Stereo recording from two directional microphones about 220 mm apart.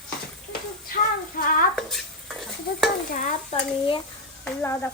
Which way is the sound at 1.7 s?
Centre (ahead or behind).